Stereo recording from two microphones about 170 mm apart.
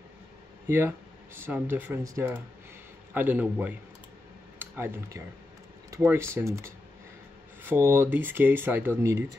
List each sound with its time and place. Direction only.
0.7 s speech: 15° right (ahead or behind)